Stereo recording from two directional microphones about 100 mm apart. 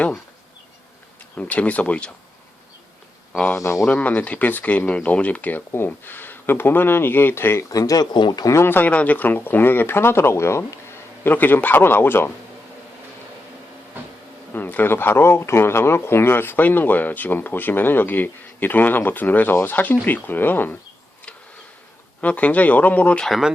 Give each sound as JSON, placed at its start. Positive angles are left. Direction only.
{"t": 1.4, "sound": "speech", "side_deg": 15}
{"t": 3.3, "sound": "speech", "side_deg": 10}
{"t": 7.7, "sound": "speech", "side_deg": 35}
{"t": 8.5, "sound": "speech", "side_deg": 20}
{"t": 14.5, "sound": "speech", "side_deg": 20}
{"t": 22.2, "sound": "speech", "side_deg": 15}